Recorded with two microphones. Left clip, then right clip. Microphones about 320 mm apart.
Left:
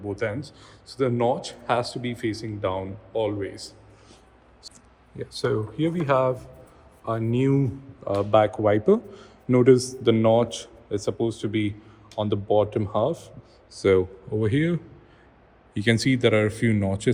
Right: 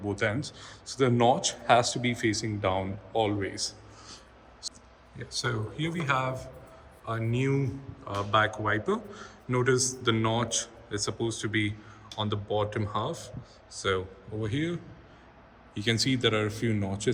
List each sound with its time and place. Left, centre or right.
0.0 s speech: centre
5.2 s speech: centre
14.4 s speech: left